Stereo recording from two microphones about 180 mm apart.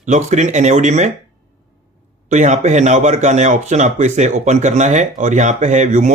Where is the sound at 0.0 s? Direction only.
40° right (ahead or behind).